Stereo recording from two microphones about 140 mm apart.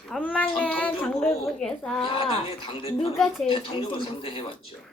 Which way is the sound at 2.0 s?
40° left (ahead or behind).